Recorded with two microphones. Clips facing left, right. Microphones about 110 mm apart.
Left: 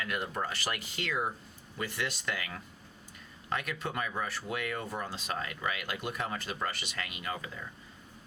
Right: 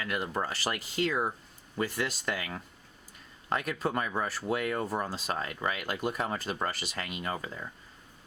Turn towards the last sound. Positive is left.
turn(degrees=-35)  # may be behind; listen again after turning